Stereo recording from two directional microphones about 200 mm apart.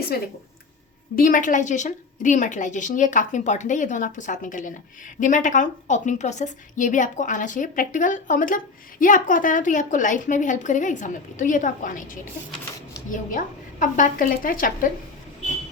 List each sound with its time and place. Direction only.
1.1 s a woman's voice: 45° left (ahead or behind)